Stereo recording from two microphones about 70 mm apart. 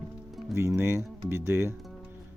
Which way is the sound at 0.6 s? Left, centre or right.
Right.